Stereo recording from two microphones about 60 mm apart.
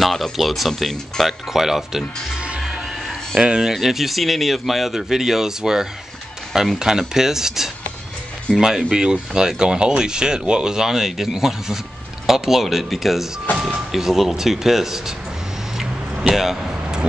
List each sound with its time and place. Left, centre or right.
0.0 s speech: centre
2.3 s music: centre
3.3 s speech: centre
16.3 s a sound: centre